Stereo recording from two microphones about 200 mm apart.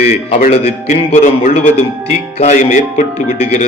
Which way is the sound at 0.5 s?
40° left (ahead or behind).